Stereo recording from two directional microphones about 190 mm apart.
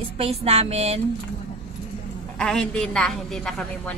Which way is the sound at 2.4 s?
5° left (ahead or behind).